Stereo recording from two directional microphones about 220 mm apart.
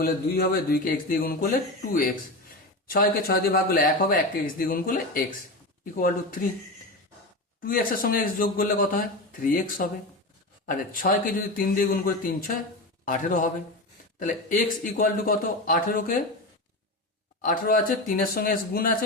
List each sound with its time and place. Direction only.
0.0 s speech: 45° left (ahead or behind)
7.6 s speech: 40° left (ahead or behind)
17.4 s speech: 40° left (ahead or behind)